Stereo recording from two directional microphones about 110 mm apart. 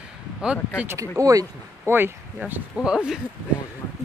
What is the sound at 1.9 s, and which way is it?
Speech, 20° right (ahead or behind).